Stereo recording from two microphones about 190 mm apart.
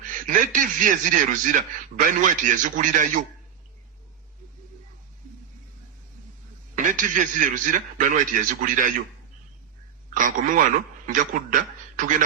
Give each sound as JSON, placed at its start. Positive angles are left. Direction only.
{"t": 0.3, "sound": "a man's voice", "side_deg": -45}
{"t": 6.7, "sound": "a man's voice", "side_deg": -45}
{"t": 10.2, "sound": "a man's voice", "side_deg": -45}